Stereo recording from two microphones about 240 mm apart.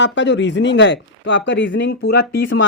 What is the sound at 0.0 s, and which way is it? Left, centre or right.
Speech, left.